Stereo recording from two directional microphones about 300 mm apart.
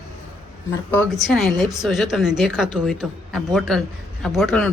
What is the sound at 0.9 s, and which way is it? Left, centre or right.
Speech, centre.